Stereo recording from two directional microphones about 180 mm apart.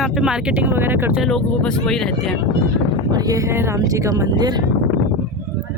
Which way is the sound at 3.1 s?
20° right (ahead or behind).